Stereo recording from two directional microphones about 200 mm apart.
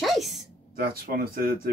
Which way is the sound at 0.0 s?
Centre (ahead or behind).